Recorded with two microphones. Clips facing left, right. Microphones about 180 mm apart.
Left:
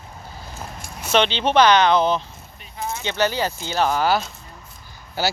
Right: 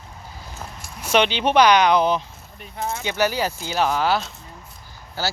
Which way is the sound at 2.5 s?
55° right (ahead or behind).